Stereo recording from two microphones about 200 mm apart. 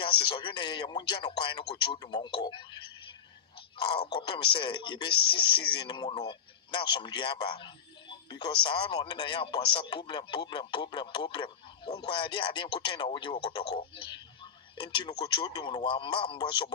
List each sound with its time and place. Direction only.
0.0 s speech: 25° left (ahead or behind)